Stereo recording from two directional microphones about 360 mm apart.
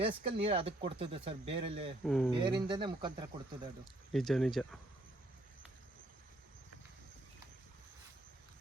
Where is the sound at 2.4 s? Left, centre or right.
Centre.